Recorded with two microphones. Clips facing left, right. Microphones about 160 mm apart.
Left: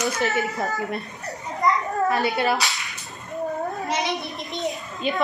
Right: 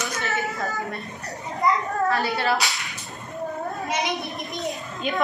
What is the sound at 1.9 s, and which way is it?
Speech, 20° left (ahead or behind).